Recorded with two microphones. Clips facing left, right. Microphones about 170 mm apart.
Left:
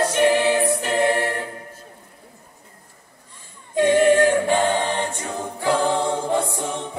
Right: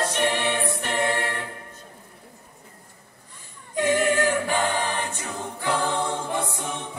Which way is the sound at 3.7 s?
25° left (ahead or behind).